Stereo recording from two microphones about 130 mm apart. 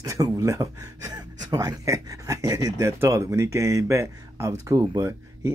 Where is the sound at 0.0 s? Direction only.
25° right (ahead or behind).